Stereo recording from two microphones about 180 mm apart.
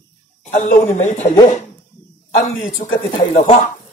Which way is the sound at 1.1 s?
35° left (ahead or behind).